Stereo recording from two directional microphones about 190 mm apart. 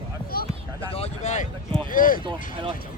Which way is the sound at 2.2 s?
25° right (ahead or behind).